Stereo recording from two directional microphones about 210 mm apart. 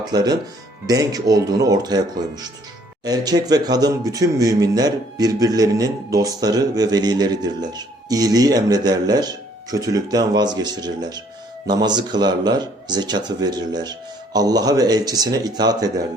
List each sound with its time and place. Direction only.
0.1 s speech: 20° right (ahead or behind)
3.0 s speech: 20° right (ahead or behind)